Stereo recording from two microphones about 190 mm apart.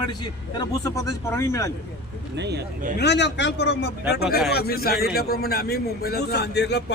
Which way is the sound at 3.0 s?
65° left (ahead or behind).